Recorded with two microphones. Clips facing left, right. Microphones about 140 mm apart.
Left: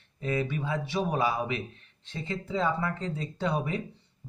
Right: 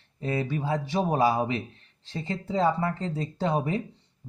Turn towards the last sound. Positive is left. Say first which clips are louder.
# right 3 dB
turn(degrees=-35)  # may be behind; listen again after turning